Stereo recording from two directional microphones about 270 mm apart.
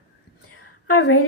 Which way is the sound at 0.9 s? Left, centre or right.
Left.